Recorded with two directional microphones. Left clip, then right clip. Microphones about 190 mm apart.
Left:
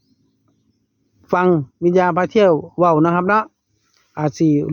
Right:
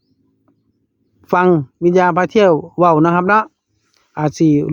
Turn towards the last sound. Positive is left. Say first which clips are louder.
# right 3 dB
turn(degrees=-25)  # may be behind; listen again after turning